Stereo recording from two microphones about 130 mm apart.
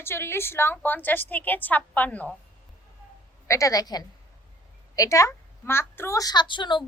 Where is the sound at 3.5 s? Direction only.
25° left (ahead or behind).